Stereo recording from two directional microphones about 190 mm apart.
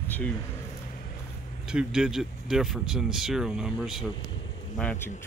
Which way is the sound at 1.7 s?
5° right (ahead or behind).